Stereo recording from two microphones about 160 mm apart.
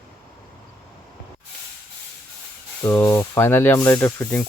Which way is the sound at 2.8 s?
20° left (ahead or behind).